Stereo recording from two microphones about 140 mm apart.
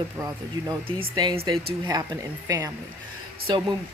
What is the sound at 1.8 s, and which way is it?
Speech, 25° right (ahead or behind).